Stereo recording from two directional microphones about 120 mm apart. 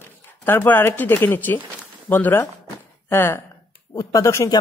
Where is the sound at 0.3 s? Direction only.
15° left (ahead or behind).